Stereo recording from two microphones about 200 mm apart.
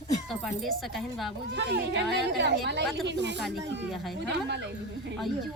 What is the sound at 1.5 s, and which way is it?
Speech, 60° right (ahead or behind).